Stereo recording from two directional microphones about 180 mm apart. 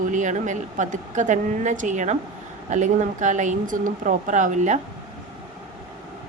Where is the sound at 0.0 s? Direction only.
45° right (ahead or behind).